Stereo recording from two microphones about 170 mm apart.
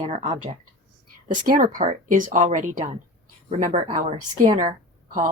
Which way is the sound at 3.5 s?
35° right (ahead or behind).